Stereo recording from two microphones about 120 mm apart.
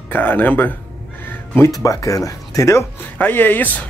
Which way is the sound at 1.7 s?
25° left (ahead or behind).